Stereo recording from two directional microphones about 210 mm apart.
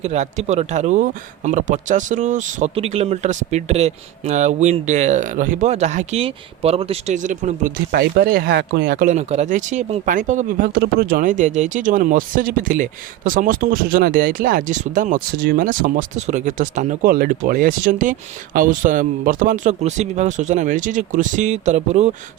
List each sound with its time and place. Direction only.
0.0 s speech: 35° right (ahead or behind)